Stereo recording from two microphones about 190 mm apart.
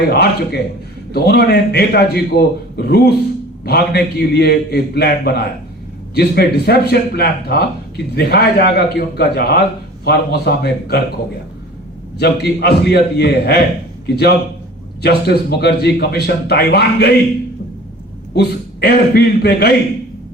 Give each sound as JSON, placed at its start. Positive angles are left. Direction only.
{"t": 0.1, "sound": "a man's voice", "side_deg": 60}
{"t": 12.2, "sound": "a man's voice", "side_deg": 60}
{"t": 15.0, "sound": "a man's voice", "side_deg": 60}
{"t": 18.3, "sound": "a man's voice", "side_deg": 60}